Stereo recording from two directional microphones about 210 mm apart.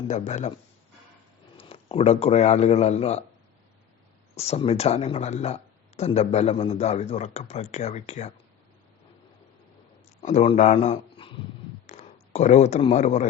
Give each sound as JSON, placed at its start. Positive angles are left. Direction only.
{"t": 0.1, "sound": "speech", "side_deg": 35}
{"t": 1.5, "sound": "speech", "side_deg": 30}
{"t": 4.4, "sound": "speech", "side_deg": 30}
{"t": 10.2, "sound": "speech", "side_deg": 30}